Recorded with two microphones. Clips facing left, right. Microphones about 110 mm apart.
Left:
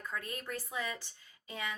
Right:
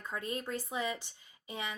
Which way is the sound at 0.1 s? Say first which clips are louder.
Right 5 dB; 20° right (ahead or behind).